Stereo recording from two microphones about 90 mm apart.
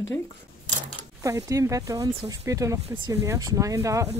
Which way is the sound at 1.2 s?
35° right (ahead or behind).